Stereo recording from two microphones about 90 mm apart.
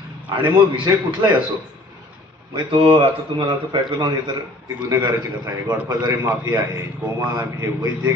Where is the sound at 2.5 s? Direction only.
70° right (ahead or behind).